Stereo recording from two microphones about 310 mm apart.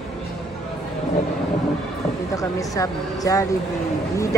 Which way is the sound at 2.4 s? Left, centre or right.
Centre.